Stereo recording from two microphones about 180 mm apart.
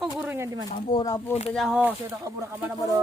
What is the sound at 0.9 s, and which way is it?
Speech, 25° left (ahead or behind).